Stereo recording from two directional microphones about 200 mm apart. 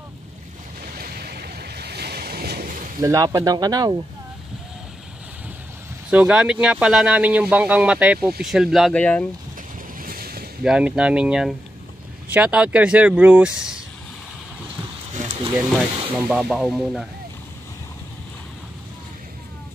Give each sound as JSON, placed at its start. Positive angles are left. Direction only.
{"t": 0.8, "sound": "waves", "side_deg": -50}
{"t": 3.0, "sound": "speech", "side_deg": -15}
{"t": 6.0, "sound": "speech", "side_deg": -5}
{"t": 9.9, "sound": "boat", "side_deg": -45}
{"t": 10.6, "sound": "speech", "side_deg": -5}
{"t": 15.1, "sound": "a sound", "side_deg": -35}
{"t": 16.3, "sound": "speech", "side_deg": -5}